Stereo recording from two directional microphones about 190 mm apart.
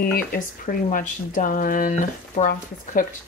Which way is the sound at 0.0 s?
50° left (ahead or behind).